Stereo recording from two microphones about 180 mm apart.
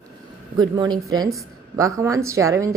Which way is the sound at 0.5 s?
25° right (ahead or behind).